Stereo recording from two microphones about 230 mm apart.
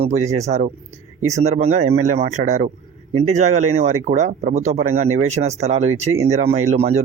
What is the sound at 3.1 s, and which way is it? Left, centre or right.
Speech, right.